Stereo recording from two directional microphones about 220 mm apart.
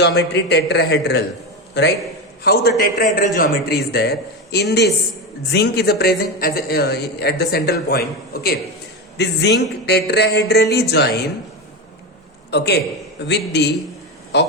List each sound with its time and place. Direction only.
0.0 s a man's voice: 50° left (ahead or behind)
2.4 s a man's voice: 45° left (ahead or behind)
12.5 s a man's voice: 50° left (ahead or behind)